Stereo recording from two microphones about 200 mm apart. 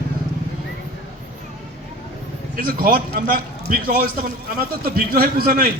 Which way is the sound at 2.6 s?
45° right (ahead or behind).